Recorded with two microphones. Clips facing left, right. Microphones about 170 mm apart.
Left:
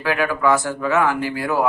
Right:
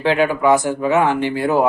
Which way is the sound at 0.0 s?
25° right (ahead or behind).